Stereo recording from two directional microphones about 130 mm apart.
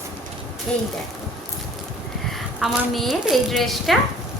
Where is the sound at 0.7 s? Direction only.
10° left (ahead or behind).